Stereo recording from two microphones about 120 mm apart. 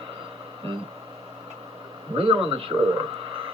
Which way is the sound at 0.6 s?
55° right (ahead or behind).